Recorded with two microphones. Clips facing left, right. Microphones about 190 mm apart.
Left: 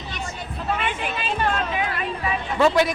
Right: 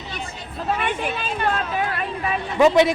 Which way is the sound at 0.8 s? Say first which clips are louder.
Right 2 dB; 45° right (ahead or behind).